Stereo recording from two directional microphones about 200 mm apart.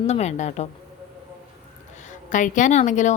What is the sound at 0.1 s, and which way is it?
Speech, 35° left (ahead or behind).